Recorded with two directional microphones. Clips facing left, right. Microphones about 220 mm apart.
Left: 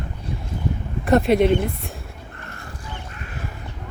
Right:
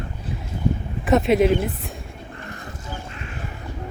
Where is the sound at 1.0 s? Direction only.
Centre (ahead or behind).